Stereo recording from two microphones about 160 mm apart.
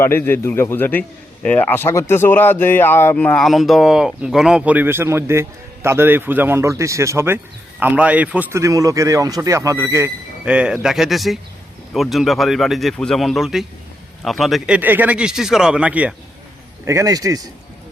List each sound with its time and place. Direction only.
0.0 s a man's voice: 15° left (ahead or behind); by 10.5 s 15° right (ahead or behind)
10.5 s a man's voice: 5° right (ahead or behind)
14.8 s a man's voice: 10° right (ahead or behind)
16.8 s a man's voice: 20° right (ahead or behind)